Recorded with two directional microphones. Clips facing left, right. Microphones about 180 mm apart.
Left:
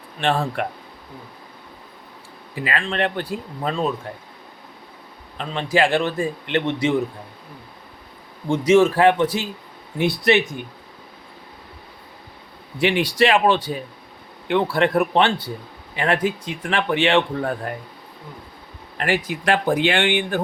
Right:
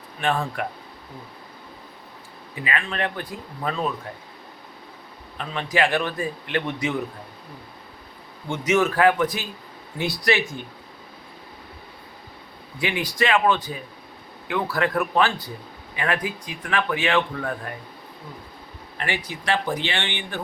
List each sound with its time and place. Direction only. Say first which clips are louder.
0.2 s a man's voice: left 3 dB; 30° left (ahead or behind)
2.6 s a man's voice: left 4 dB; 30° left (ahead or behind)
5.4 s a man's voice: left 3 dB; 30° left (ahead or behind)
8.4 s a man's voice: left 6 dB; 30° left (ahead or behind)
13.1 s a man's voice: left 1 dB; 30° left (ahead or behind)
19.0 s speech: left 6 dB; 45° left (ahead or behind)